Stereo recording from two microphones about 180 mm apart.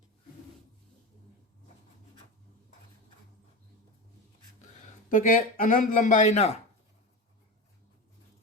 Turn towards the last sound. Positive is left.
turn(degrees=40)  # may be behind; listen again after turning